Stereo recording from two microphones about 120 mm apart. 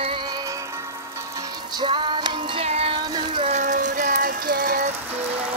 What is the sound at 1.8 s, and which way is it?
Music, 40° right (ahead or behind).